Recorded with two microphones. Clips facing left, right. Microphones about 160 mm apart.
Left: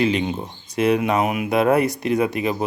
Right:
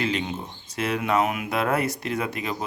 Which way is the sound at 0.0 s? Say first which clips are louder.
Left 6 dB; 15° left (ahead or behind).